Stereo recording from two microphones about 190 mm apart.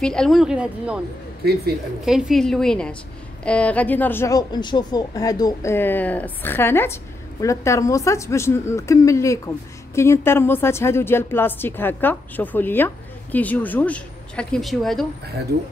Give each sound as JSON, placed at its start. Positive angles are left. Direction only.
{"t": 0.0, "sound": "a woman's voice", "side_deg": 5}
{"t": 2.0, "sound": "a woman's voice", "side_deg": 0}